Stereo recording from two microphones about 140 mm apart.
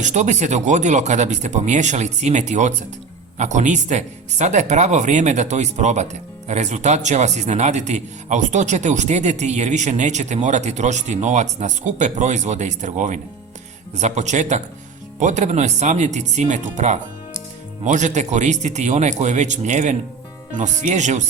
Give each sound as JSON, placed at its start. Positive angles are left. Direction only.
{"t": 0.0, "sound": "a man's voice", "side_deg": -55}